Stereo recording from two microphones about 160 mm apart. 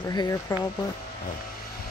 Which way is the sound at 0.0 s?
25° left (ahead or behind).